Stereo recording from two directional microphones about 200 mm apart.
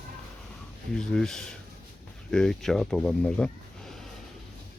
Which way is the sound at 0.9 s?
5° left (ahead or behind).